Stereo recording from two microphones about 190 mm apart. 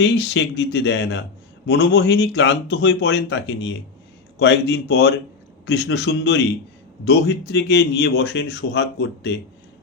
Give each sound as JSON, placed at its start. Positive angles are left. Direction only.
{"t": 0.0, "sound": "a man's voice", "side_deg": 65}